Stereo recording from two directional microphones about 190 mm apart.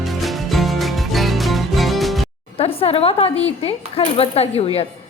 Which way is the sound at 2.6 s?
30° left (ahead or behind).